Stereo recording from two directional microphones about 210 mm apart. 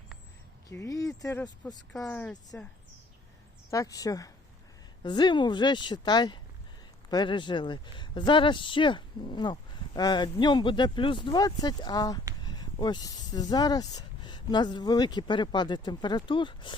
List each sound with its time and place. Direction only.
0.7 s speech: 15° left (ahead or behind)
3.7 s speech: 15° left (ahead or behind)